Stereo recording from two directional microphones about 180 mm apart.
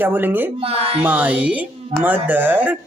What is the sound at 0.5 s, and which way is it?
Speech, 35° right (ahead or behind).